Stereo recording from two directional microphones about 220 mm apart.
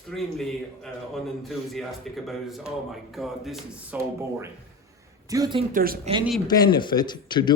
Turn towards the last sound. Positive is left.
turn(degrees=20)  # may be behind; listen again after turning